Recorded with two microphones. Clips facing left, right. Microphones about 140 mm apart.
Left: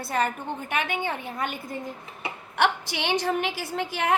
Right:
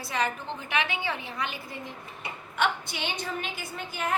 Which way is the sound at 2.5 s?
70° left (ahead or behind).